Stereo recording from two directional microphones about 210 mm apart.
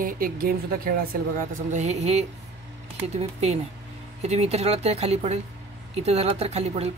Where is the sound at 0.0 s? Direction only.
45° right (ahead or behind).